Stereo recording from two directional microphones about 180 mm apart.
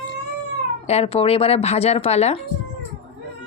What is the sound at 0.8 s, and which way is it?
Speech, 35° left (ahead or behind).